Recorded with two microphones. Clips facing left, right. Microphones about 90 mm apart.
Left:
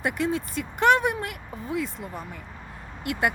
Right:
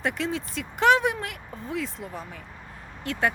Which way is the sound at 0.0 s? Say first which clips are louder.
Left 2 dB; 5° left (ahead or behind).